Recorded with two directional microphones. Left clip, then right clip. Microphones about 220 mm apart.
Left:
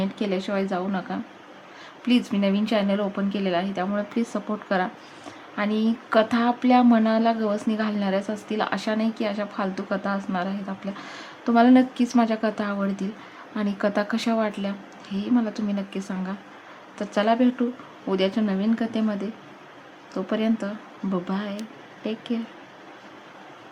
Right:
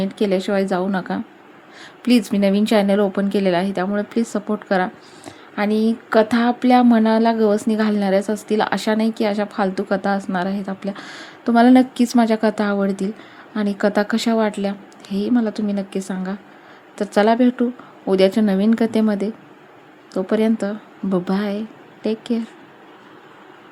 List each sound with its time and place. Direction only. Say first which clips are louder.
0.0 s speech: right 7 dB; 25° right (ahead or behind)